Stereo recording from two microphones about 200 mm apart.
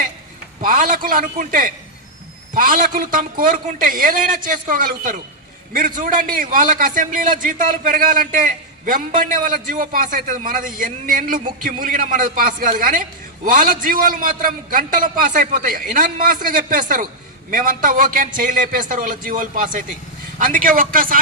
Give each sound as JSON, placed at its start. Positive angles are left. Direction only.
{"t": 0.6, "sound": "a man's voice", "side_deg": -40}